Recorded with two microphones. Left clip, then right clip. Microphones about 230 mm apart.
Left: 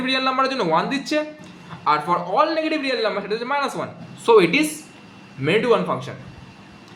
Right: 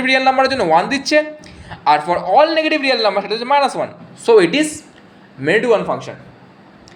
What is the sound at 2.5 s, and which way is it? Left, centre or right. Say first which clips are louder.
A man's voice: right 7 dB; centre.